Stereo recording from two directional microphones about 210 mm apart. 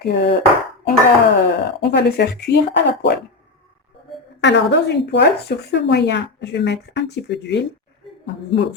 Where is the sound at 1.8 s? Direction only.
50° left (ahead or behind).